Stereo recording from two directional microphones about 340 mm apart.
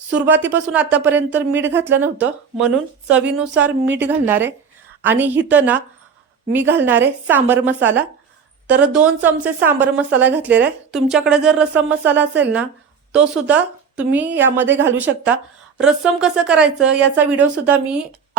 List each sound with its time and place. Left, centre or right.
0.1 s a woman's voice: centre
3.8 s a woman's voice: right
4.3 s a woman's voice: centre